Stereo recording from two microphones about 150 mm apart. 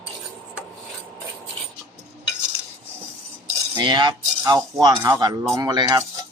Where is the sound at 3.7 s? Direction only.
30° right (ahead or behind).